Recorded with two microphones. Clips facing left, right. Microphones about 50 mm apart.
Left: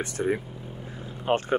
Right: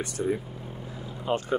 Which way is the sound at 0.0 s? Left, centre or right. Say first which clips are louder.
Left 2 dB; left.